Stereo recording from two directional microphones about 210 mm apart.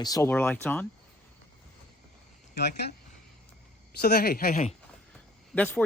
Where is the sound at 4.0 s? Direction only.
50° left (ahead or behind).